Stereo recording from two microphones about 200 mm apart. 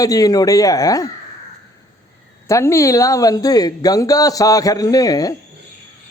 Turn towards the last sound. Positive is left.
turn(degrees=20)  # may be behind; listen again after turning